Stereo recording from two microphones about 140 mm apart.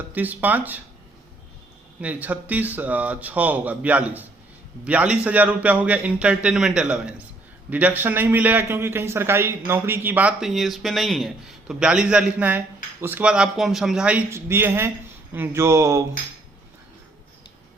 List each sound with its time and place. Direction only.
0.1 s a man's voice: 10° right (ahead or behind)
2.0 s a man's voice: 10° right (ahead or behind)
14.3 s speech: 20° right (ahead or behind)